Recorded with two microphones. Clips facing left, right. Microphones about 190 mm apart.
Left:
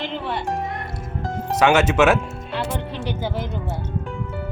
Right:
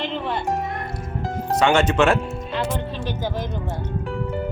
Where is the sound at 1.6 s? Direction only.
5° left (ahead or behind).